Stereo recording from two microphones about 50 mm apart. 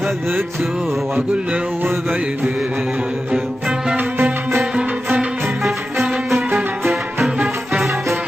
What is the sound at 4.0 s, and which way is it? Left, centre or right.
Music, right.